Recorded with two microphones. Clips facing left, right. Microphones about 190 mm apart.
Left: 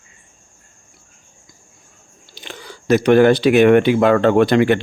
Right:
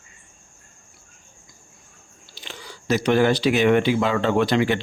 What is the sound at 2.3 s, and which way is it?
Speech, 55° left (ahead or behind).